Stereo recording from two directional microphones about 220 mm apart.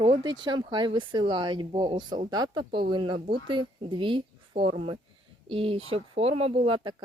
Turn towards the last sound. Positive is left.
turn(degrees=-20)  # may be behind; listen again after turning